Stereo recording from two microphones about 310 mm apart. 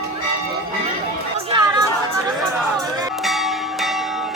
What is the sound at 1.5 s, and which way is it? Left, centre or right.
Music, centre.